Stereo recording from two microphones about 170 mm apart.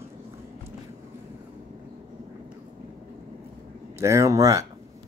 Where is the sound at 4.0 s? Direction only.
15° right (ahead or behind).